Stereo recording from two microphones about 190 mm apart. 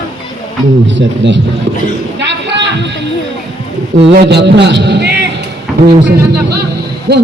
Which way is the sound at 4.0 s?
65° right (ahead or behind).